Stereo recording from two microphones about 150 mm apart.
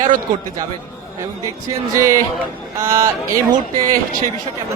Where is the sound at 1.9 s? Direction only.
20° right (ahead or behind).